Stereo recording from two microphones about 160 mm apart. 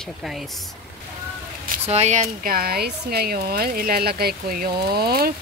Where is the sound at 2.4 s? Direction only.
70° right (ahead or behind).